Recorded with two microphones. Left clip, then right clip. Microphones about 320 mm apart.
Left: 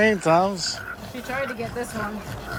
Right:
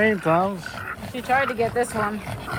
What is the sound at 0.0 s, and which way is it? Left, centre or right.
Speech, centre.